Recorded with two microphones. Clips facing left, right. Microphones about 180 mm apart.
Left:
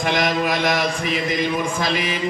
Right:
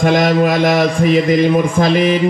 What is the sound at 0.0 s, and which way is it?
Mantra, 50° right (ahead or behind).